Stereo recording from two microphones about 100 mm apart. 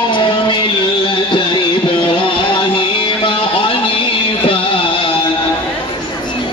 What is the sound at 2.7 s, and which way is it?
Music, 65° left (ahead or behind).